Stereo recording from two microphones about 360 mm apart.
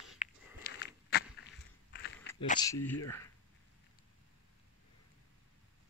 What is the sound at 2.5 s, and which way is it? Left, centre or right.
Speech, centre.